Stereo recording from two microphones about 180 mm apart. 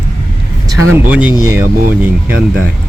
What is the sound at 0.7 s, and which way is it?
Speech, 10° right (ahead or behind).